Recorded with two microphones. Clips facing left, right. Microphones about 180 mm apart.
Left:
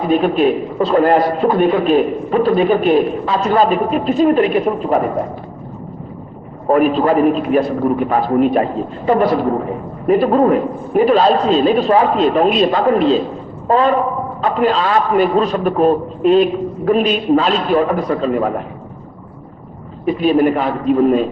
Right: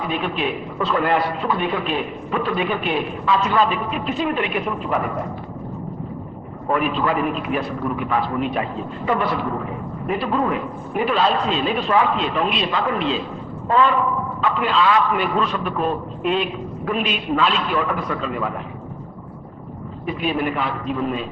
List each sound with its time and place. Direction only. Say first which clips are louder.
0.0 s a man's voice: left 10 dB; 40° left (ahead or behind)
6.7 s a man's voice: left 8 dB; 40° left (ahead or behind)
20.1 s a man's voice: left 10 dB; 40° left (ahead or behind)